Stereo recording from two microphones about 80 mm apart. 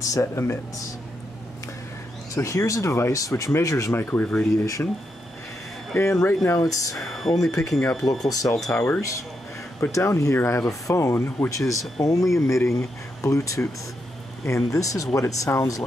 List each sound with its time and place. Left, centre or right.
0.0 s a sound: left
2.3 s speech: left
3.9 s speech: left
5.9 s speech: left
7.0 s speech: centre
8.3 s speech: left
8.7 s speech: left
9.8 s speech: left